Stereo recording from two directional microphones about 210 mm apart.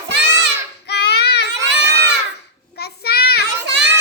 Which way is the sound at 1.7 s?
55° right (ahead or behind).